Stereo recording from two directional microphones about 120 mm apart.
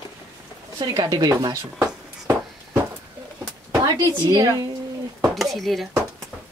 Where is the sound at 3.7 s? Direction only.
30° right (ahead or behind).